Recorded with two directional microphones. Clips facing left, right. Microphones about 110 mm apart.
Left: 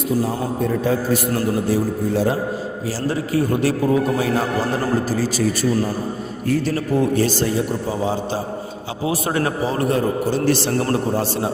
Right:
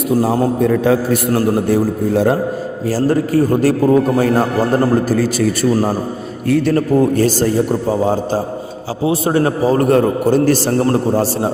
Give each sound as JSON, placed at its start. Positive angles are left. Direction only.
{"t": 0.2, "sound": "a man's voice", "side_deg": -70}
{"t": 1.4, "sound": "a man's voice", "side_deg": -55}
{"t": 6.5, "sound": "a man's voice", "side_deg": -60}
{"t": 6.9, "sound": "a man's voice", "side_deg": -45}
{"t": 9.0, "sound": "a man's voice", "side_deg": -30}
{"t": 9.9, "sound": "a man's voice", "side_deg": -55}